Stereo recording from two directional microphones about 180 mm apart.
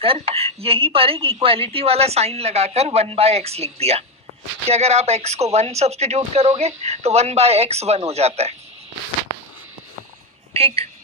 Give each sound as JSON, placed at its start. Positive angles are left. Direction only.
{"t": 0.0, "sound": "a woman's voice", "side_deg": -30}
{"t": 10.5, "sound": "speech", "side_deg": -35}